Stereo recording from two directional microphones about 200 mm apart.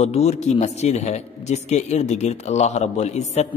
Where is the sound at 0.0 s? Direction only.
30° left (ahead or behind).